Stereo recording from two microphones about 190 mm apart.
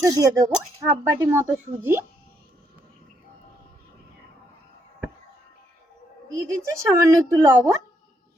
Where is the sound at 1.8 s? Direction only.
10° right (ahead or behind).